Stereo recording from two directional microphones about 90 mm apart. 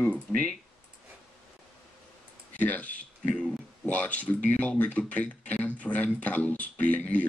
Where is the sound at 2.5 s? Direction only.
15° left (ahead or behind).